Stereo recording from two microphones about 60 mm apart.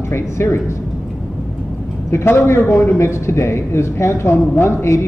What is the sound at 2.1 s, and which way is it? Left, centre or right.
Speech, left.